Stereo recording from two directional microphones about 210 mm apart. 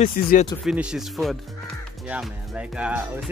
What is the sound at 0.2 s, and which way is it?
Speech, 45° left (ahead or behind).